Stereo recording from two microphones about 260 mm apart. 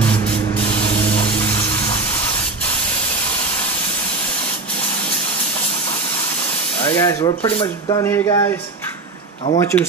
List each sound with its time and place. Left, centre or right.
0.7 s a sound: left
6.8 s speech: centre
7.4 s speech: left
8.0 s speech: centre
9.6 s speech: centre